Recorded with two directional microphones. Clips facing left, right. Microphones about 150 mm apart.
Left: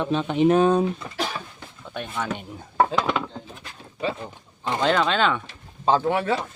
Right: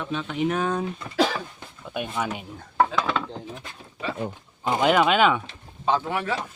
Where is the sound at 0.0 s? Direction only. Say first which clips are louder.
Left 6 dB; 30° left (ahead or behind).